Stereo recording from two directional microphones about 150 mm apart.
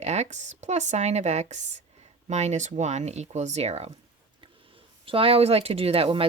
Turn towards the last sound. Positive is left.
turn(degrees=-40)  # may be behind; listen again after turning